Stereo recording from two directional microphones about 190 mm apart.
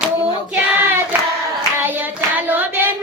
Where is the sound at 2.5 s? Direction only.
10° right (ahead or behind).